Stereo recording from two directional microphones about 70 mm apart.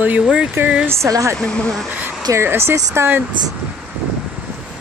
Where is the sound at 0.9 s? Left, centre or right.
Right.